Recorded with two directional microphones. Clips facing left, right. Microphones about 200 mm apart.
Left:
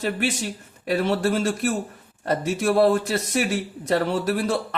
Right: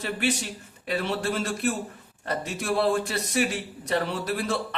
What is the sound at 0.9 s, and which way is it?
A man's voice, 45° left (ahead or behind).